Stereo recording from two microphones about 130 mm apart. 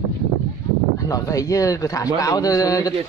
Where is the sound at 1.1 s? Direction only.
25° left (ahead or behind).